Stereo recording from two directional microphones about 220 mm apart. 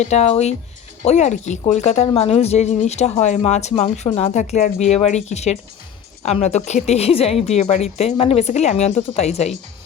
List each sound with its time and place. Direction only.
0.0 s a woman's voice: 30° left (ahead or behind)